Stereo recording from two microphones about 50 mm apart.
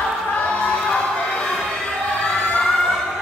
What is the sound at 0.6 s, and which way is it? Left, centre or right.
Crowd, left.